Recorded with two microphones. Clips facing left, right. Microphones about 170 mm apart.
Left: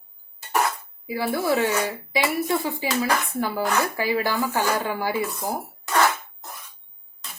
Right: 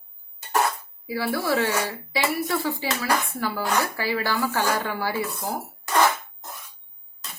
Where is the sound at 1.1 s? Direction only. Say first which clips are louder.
Left 2 dB; 20° left (ahead or behind).